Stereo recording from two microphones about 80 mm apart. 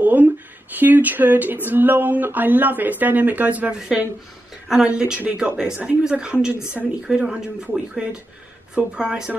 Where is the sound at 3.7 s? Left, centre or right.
Centre.